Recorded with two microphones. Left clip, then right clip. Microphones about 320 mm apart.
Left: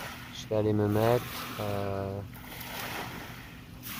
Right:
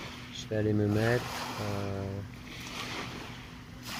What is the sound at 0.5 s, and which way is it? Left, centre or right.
Speech, left.